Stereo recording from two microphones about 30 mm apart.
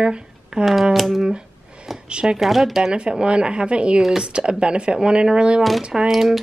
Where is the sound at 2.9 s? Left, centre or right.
Right.